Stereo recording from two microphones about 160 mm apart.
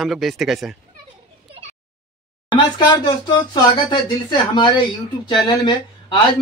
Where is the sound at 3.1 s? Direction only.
25° left (ahead or behind).